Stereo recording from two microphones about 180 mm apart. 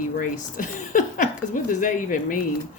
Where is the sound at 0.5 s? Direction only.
45° left (ahead or behind).